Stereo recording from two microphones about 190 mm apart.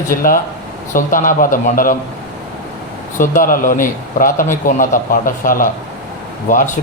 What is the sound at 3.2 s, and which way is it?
A man's voice, 45° left (ahead or behind).